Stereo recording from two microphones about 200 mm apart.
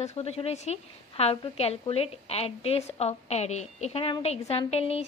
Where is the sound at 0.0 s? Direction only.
30° left (ahead or behind).